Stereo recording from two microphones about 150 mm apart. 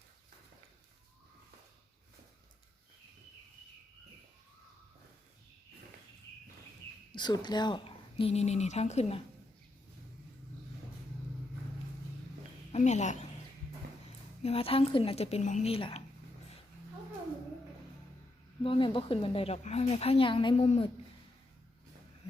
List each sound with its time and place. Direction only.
7.1 s speech: 30° left (ahead or behind); by 9.2 s 45° left (ahead or behind)
12.7 s speech: 50° left (ahead or behind)
14.4 s a woman's voice: 40° left (ahead or behind)
15.7 s speech: 40° left (ahead or behind)
18.6 s a woman's voice: 35° left (ahead or behind)